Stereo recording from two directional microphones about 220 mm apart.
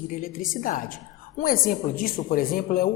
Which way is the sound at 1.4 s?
40° left (ahead or behind).